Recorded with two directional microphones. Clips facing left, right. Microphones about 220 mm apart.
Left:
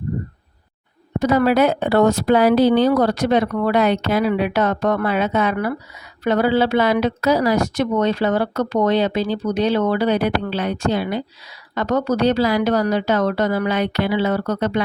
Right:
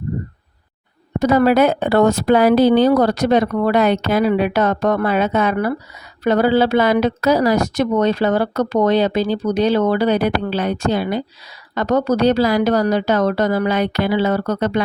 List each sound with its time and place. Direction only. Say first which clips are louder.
1.2 s a woman's voice: right 2 dB; 45° right (ahead or behind)